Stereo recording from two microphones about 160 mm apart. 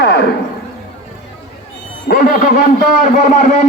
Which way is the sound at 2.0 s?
65° left (ahead or behind).